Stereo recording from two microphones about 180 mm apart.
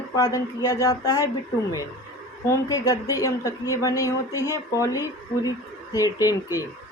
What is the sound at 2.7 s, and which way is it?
Speech, 20° left (ahead or behind).